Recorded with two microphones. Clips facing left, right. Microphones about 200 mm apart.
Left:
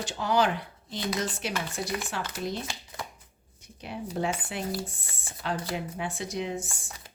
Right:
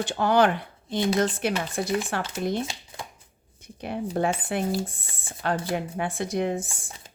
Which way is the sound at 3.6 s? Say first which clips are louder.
Right 7 dB; 55° right (ahead or behind).